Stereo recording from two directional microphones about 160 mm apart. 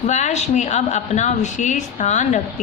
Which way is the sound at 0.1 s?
45° left (ahead or behind).